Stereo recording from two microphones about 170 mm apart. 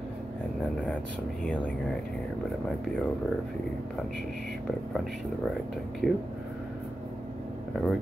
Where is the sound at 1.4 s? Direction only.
5° left (ahead or behind).